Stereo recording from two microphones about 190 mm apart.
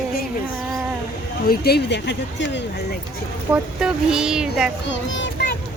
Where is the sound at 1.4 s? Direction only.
55° left (ahead or behind).